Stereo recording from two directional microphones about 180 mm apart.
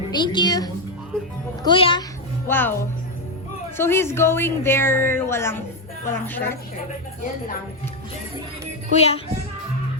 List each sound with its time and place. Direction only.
0.1 s a woman's voice: 25° left (ahead or behind)
2.5 s a woman's voice: 10° left (ahead or behind)
3.8 s a woman's voice: 15° left (ahead or behind)
9.0 s speech: 35° left (ahead or behind)